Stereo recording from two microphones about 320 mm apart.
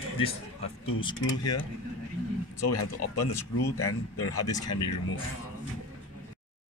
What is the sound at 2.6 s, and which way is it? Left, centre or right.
Speech, left.